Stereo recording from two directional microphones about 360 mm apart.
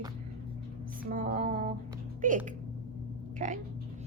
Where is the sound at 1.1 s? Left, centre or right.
Right.